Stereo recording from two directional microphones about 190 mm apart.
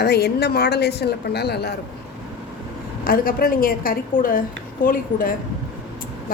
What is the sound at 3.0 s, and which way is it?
A woman's voice, 50° left (ahead or behind).